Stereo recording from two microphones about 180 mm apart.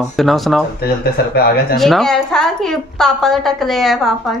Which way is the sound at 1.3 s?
60° left (ahead or behind).